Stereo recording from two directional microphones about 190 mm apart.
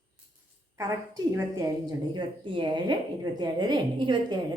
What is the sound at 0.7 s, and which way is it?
A woman's voice, 20° right (ahead or behind).